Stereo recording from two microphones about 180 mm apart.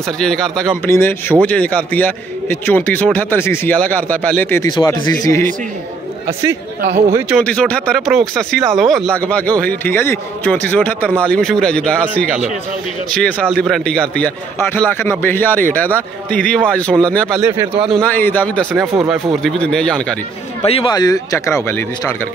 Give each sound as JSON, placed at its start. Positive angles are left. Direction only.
{"t": 0.2, "sound": "speech", "side_deg": 5}
{"t": 0.8, "sound": "a man's voice", "side_deg": 15}
{"t": 4.6, "sound": "speech", "side_deg": 25}
{"t": 7.1, "sound": "speech", "side_deg": -15}
{"t": 7.4, "sound": "a man's voice", "side_deg": 5}
{"t": 17.4, "sound": "speech", "side_deg": -15}
{"t": 17.9, "sound": "a man's voice", "side_deg": 10}
{"t": 20.6, "sound": "speech", "side_deg": 35}
{"t": 20.9, "sound": "a man's voice", "side_deg": 20}